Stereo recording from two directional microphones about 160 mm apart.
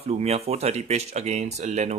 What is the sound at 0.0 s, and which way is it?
Speech, 40° right (ahead or behind).